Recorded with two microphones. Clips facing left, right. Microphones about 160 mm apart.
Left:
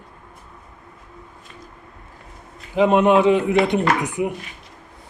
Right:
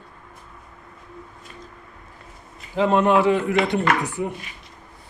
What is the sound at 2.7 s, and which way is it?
Speech, 15° left (ahead or behind).